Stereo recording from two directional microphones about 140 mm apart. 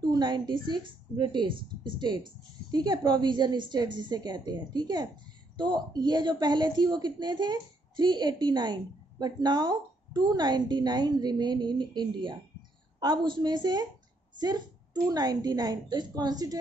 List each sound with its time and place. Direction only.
0.1 s a woman's voice: 30° right (ahead or behind)
15.0 s a woman's voice: 30° right (ahead or behind)